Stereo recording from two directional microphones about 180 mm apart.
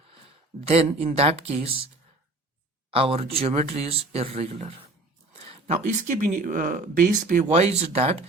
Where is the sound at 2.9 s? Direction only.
30° right (ahead or behind).